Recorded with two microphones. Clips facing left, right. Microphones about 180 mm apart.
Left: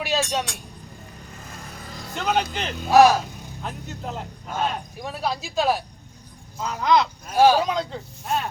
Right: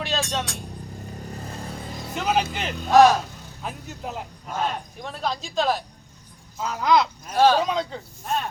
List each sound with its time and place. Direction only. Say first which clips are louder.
0.0 s vehicle: left 2 dB; 10° left (ahead or behind)
1.3 s vehicle: right 5 dB; 35° right (ahead or behind)
2.1 s speech: even; 5° right (ahead or behind)
2.9 s speech: even; 10° left (ahead or behind)
3.6 s speech: even; 5° right (ahead or behind)
5.0 s speech: left 1 dB; 10° left (ahead or behind)
6.6 s speech: even; 5° right (ahead or behind)
7.3 s speech: left 2 dB; 10° left (ahead or behind)